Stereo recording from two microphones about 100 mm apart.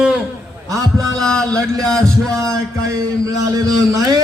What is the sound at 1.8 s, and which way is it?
Music, 5° left (ahead or behind).